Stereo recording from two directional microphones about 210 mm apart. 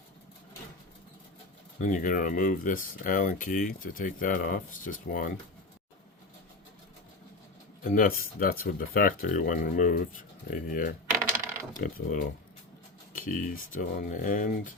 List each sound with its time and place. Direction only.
1.8 s speech: 40° left (ahead or behind)
7.9 s speech: 45° left (ahead or behind)